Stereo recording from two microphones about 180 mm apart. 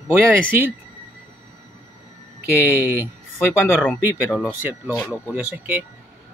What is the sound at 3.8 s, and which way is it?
Speech, centre (ahead or behind).